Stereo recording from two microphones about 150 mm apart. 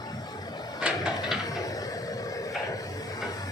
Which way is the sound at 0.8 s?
5° right (ahead or behind).